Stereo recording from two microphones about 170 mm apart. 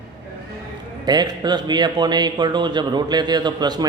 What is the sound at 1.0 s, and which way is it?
Speech, 25° right (ahead or behind).